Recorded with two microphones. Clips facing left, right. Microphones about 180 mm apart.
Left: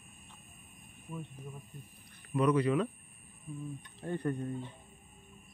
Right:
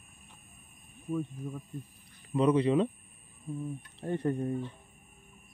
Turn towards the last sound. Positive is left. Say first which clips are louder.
# right 4 dB
turn(degrees=-25)  # may be behind; listen again after turning